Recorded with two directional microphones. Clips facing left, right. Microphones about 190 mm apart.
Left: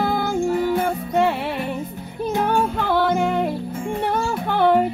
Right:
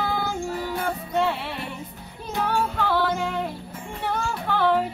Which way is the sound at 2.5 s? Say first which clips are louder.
Left 4 dB; 55° left (ahead or behind).